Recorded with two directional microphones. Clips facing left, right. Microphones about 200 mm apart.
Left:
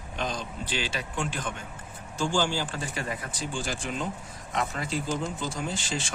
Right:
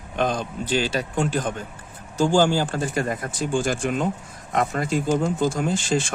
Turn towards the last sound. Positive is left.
turn(degrees=-50)  # may be behind; listen again after turning